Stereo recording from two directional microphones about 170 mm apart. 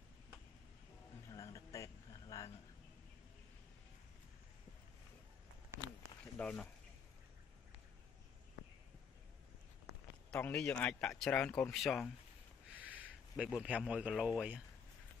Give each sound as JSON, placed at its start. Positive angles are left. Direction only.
{"t": 1.3, "sound": "a sound", "side_deg": 20}
{"t": 6.3, "sound": "speech", "side_deg": 5}
{"t": 10.3, "sound": "a man's voice", "side_deg": 5}